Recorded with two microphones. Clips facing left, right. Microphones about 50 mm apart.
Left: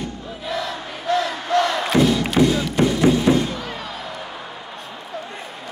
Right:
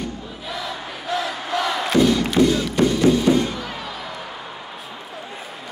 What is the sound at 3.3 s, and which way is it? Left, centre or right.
Crowd, left.